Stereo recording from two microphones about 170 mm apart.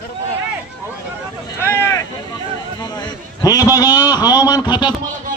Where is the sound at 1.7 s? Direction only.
15° left (ahead or behind).